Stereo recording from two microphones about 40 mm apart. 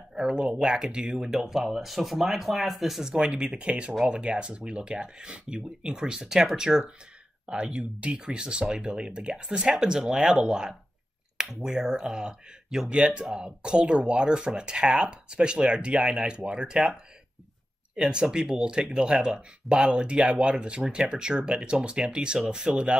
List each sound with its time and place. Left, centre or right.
0.1 s speech: centre
1.3 s speech: centre
3.1 s speech: centre
7.4 s speech: right
18.0 s speech: right